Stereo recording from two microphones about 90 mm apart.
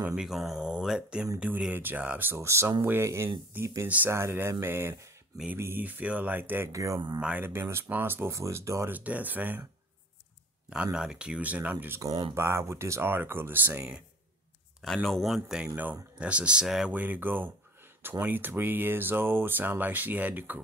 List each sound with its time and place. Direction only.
0.0 s speech: 5° right (ahead or behind); by 3.8 s 35° right (ahead or behind)
3.8 s speech: 20° right (ahead or behind)
6.7 s speech: 35° right (ahead or behind)
7.2 s speech: 10° right (ahead or behind)
7.4 s speech: 25° right (ahead or behind)
8.9 s speech: 20° right (ahead or behind)
10.7 s speech: 10° right (ahead or behind)
15.0 s speech: centre (ahead or behind)
15.7 s speech: 20° right (ahead or behind)
16.9 s speech: 20° right (ahead or behind)